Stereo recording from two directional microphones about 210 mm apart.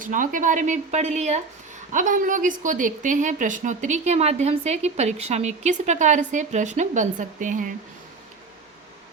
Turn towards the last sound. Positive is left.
turn(degrees=-40)  # may be behind; listen again after turning